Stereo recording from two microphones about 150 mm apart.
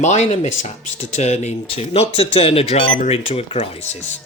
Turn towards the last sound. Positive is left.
turn(degrees=40)  # may be behind; listen again after turning